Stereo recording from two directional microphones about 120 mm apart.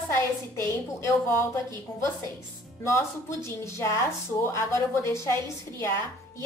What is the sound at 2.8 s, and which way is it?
A woman's voice, 25° left (ahead or behind).